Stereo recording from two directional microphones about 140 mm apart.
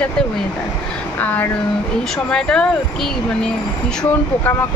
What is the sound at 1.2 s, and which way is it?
A woman's voice, 10° left (ahead or behind).